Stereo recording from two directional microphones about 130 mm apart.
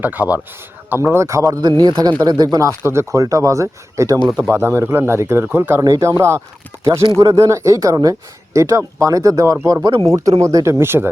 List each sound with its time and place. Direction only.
0.0 s speech: 15° right (ahead or behind)